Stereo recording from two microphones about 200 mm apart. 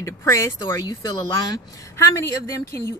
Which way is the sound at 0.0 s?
15° left (ahead or behind).